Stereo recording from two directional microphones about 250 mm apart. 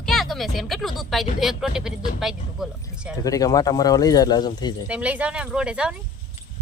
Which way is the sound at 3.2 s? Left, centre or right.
Centre.